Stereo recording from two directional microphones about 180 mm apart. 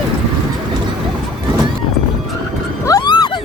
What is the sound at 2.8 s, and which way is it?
Wild animals, 20° left (ahead or behind).